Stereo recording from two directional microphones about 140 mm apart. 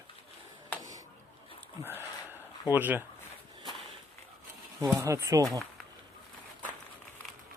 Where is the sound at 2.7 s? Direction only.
15° right (ahead or behind).